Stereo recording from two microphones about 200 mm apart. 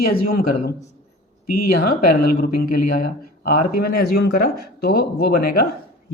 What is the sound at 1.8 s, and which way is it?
Speech, 50° left (ahead or behind).